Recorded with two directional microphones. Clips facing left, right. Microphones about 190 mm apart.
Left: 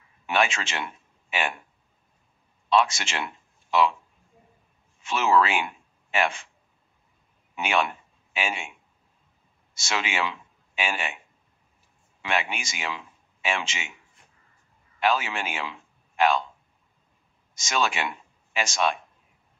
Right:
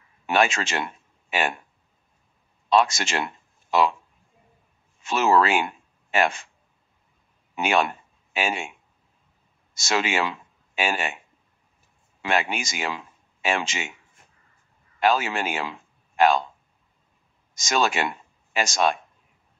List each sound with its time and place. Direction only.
0.3 s a man's voice: 40° right (ahead or behind)
2.7 s a man's voice: 40° right (ahead or behind)
5.0 s a man's voice: 40° right (ahead or behind)
7.5 s a man's voice: 40° right (ahead or behind)
9.8 s a man's voice: 40° right (ahead or behind)
12.2 s speech: 40° right (ahead or behind)
15.0 s a man's voice: 40° right (ahead or behind)
17.6 s speech: 40° right (ahead or behind)